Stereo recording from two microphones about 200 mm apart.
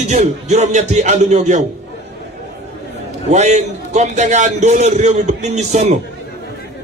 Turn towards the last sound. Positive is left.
turn(degrees=-35)  # may be behind; listen again after turning